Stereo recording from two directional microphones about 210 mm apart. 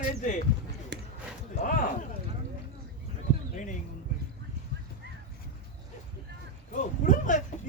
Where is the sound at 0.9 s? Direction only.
55° right (ahead or behind).